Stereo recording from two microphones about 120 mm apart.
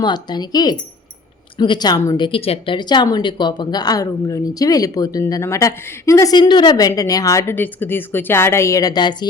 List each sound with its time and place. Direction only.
0.0 s speech: 35° left (ahead or behind)